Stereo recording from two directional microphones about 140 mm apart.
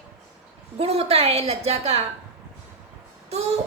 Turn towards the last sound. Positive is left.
turn(degrees=-50)  # may be behind; listen again after turning